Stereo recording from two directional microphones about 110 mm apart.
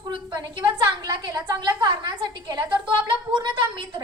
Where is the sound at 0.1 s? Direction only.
45° right (ahead or behind).